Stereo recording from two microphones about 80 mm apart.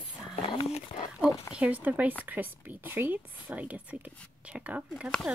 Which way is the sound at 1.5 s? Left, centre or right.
Centre.